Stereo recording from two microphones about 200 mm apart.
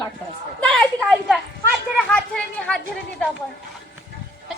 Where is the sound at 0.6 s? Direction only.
Centre (ahead or behind).